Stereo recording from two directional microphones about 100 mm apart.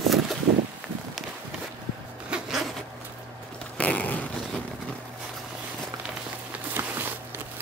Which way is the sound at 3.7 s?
15° left (ahead or behind).